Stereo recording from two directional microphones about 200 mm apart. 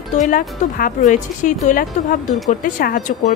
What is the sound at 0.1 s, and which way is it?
A woman's voice, 40° left (ahead or behind).